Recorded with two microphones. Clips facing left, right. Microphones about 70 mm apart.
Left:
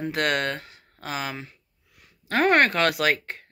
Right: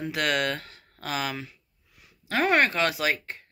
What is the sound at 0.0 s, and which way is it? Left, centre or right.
Speech, left.